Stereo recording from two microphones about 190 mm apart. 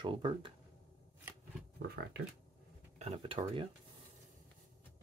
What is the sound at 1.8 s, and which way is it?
Speech, 55° right (ahead or behind).